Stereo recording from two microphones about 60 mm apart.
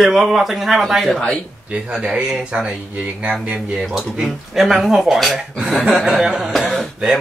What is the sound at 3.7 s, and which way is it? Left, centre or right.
A man's voice, centre.